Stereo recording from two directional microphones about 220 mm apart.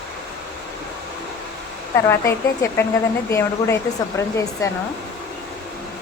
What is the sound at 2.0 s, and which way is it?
A woman's voice, 10° left (ahead or behind).